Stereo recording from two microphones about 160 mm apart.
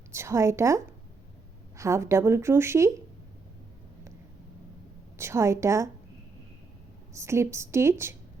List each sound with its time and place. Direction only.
0.1 s speech: 15° right (ahead or behind)
5.1 s speech: 15° right (ahead or behind)
7.1 s speech: 20° right (ahead or behind)